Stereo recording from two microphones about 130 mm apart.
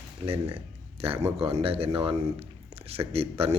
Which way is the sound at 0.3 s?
45° right (ahead or behind).